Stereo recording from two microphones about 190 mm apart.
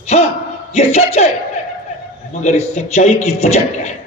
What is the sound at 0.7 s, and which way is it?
Speech, 35° left (ahead or behind).